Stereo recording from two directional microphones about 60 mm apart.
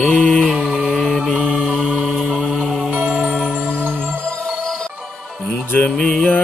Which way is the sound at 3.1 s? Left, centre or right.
Centre.